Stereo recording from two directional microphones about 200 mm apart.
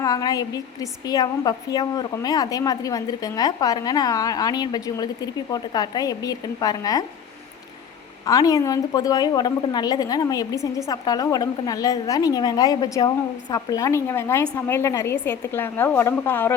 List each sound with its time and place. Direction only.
0.0 s a woman's voice: 20° left (ahead or behind)
8.2 s a woman's voice: 15° left (ahead or behind)